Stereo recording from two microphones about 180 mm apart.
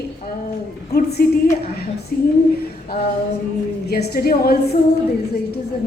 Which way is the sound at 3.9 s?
60° left (ahead or behind).